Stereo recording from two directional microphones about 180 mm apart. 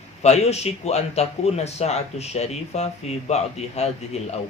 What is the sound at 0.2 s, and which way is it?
A man's voice, 35° left (ahead or behind).